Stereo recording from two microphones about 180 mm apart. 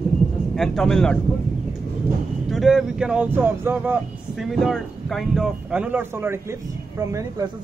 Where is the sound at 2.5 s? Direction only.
Centre (ahead or behind).